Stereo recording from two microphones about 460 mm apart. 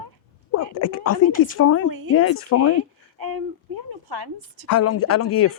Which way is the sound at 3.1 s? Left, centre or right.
Right.